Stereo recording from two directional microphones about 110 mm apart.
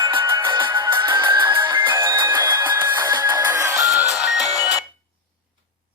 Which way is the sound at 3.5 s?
25° right (ahead or behind).